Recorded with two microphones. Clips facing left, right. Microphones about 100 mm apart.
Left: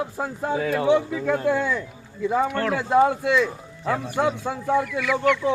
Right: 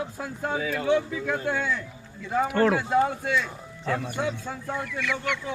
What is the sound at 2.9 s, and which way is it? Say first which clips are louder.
Speech: left 5 dB; 90° left.